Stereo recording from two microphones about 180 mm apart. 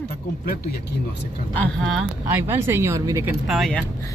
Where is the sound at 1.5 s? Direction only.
5° left (ahead or behind); by 3.2 s 15° right (ahead or behind).